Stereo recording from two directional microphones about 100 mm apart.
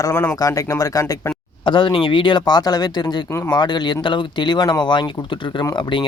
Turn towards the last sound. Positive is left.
turn(degrees=55)  # may be behind; listen again after turning